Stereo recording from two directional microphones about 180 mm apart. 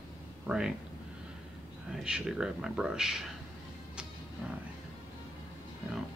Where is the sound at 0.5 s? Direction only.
5° right (ahead or behind).